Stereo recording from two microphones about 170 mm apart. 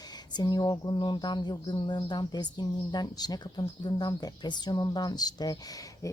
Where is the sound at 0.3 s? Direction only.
25° left (ahead or behind).